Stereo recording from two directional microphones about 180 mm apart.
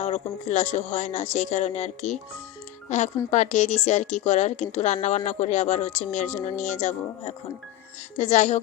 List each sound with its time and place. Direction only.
0.0 s speech: 40° left (ahead or behind)